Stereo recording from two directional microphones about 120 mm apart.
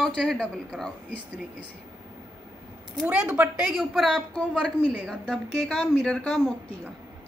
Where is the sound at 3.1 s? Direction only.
15° right (ahead or behind).